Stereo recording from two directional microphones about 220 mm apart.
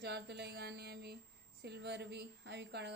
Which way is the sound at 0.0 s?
50° right (ahead or behind).